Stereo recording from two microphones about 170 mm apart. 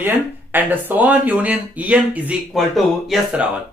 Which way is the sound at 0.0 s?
10° right (ahead or behind).